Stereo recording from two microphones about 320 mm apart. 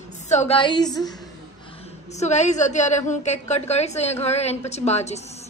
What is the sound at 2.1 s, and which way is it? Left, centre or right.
A woman's voice, left.